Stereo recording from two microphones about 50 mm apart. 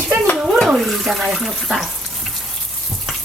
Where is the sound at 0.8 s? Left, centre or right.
Centre.